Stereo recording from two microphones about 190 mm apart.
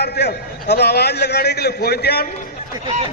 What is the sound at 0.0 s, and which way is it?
A man's voice, 60° left (ahead or behind).